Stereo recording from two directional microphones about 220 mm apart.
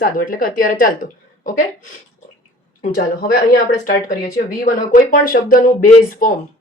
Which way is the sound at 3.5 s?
40° left (ahead or behind).